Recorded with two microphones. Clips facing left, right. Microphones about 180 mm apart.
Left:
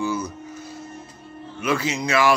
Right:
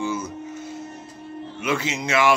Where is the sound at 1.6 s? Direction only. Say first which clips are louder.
Left 2 dB; 20° right (ahead or behind).